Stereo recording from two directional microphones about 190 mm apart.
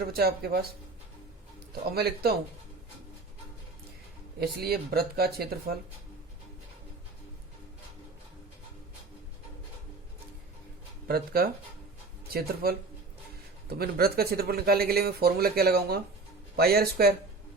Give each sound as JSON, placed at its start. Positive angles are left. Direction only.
{"t": 0.0, "sound": "speech", "side_deg": -55}
{"t": 1.9, "sound": "speech", "side_deg": -55}
{"t": 4.4, "sound": "speech", "side_deg": -55}
{"t": 11.1, "sound": "speech", "side_deg": -50}